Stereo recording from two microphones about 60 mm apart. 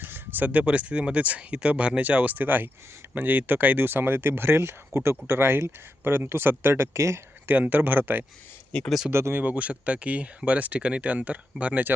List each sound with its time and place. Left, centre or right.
0.0 s speech: right
7.4 s speech: right
8.7 s speech: centre
9.1 s speech: right
9.4 s speech: right